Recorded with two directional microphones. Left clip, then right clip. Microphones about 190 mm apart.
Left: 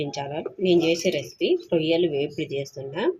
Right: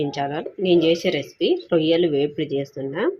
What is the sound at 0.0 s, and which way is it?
A woman's voice, 20° right (ahead or behind).